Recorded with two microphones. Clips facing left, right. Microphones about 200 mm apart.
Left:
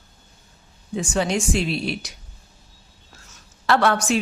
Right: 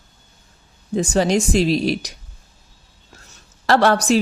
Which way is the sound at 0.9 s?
40° right (ahead or behind).